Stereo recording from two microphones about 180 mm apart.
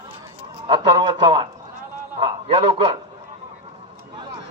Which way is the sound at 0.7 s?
25° right (ahead or behind).